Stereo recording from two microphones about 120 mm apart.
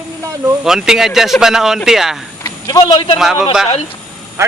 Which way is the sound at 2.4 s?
30° left (ahead or behind).